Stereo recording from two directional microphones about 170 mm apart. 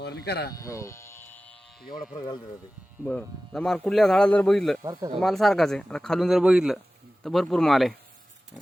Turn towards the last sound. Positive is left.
turn(degrees=0)  # may be behind; listen again after turning